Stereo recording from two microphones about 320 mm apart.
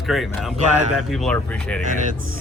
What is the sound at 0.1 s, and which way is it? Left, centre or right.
Speech, centre.